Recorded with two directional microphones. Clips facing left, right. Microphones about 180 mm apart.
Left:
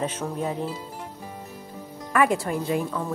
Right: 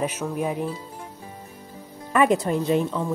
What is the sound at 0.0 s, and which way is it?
Speech, 10° right (ahead or behind).